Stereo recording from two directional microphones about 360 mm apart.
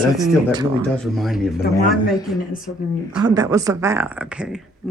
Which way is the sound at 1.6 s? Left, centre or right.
Left.